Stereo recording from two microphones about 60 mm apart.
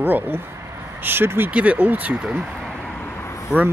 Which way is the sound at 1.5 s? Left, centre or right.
Right.